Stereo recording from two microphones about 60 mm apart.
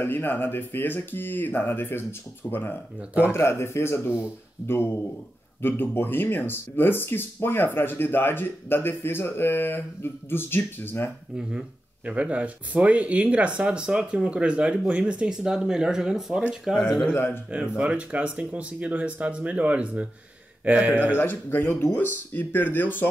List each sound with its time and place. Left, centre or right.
0.0 s speech: left
3.3 s speech: left
12.1 s speech: right
17.0 s speech: left
17.5 s speech: right
21.2 s speech: left